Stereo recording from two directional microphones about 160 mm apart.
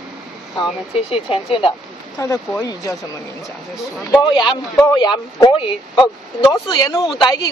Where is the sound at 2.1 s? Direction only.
20° left (ahead or behind).